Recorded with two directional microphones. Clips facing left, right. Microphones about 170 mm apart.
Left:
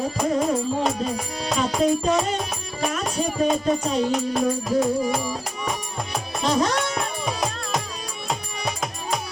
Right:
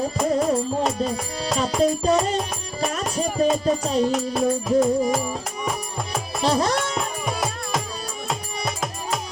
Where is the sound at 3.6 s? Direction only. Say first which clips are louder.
Right 1 dB; 35° right (ahead or behind).